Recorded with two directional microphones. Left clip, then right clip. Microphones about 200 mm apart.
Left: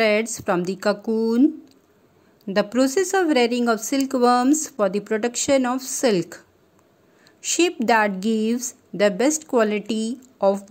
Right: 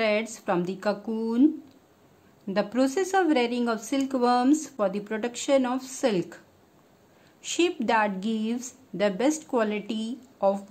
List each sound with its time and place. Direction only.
0.0 s speech: 20° left (ahead or behind)
2.5 s speech: 20° left (ahead or behind)
7.4 s speech: 20° left (ahead or behind)